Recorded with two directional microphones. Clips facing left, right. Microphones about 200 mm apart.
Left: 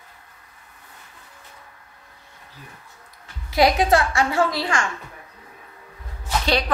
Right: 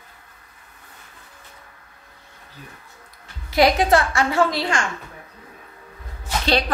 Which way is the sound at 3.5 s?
25° right (ahead or behind).